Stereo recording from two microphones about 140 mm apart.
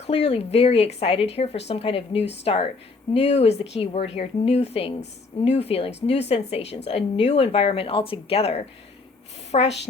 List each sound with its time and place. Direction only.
0.1 s a woman's voice: 45° left (ahead or behind)